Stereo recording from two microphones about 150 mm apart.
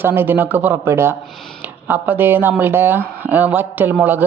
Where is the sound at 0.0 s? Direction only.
15° right (ahead or behind).